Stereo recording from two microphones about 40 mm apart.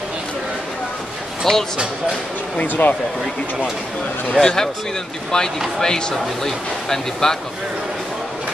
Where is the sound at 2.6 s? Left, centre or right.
Left.